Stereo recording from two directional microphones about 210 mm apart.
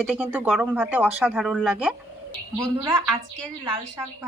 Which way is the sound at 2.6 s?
15° right (ahead or behind).